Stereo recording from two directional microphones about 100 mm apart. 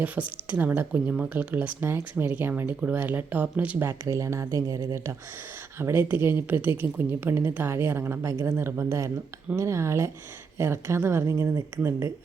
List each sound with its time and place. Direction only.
0.0 s speech: 15° right (ahead or behind)
3.8 s speech: 30° right (ahead or behind)
5.8 s a woman's voice: 20° right (ahead or behind)